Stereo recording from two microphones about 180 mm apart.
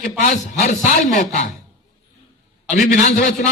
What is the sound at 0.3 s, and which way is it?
A man's voice, 45° left (ahead or behind).